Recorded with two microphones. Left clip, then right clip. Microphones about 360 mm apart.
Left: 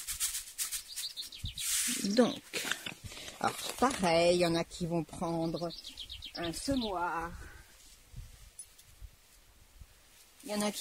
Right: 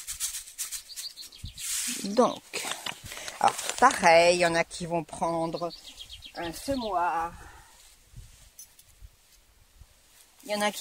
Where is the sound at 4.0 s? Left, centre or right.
Right.